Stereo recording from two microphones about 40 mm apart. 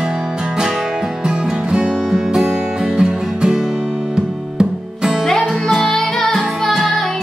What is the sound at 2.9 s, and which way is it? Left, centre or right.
Music, centre.